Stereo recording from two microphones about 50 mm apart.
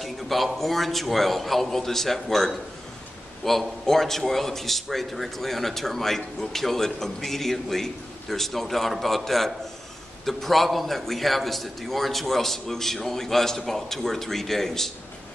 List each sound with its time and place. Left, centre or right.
0.0 s a man's voice: centre